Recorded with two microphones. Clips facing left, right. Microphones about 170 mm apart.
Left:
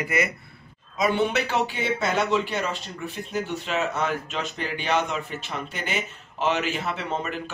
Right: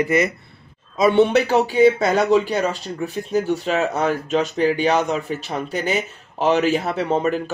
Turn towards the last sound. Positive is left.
turn(degrees=-40)  # may be behind; listen again after turning